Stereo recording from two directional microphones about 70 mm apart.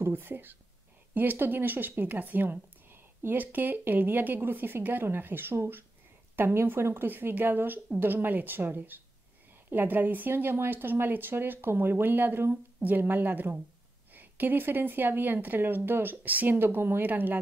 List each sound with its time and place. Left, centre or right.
0.0 s speech: right